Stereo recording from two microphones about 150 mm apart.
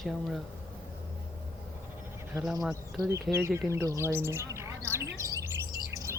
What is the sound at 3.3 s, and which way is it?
Speech, 15° right (ahead or behind).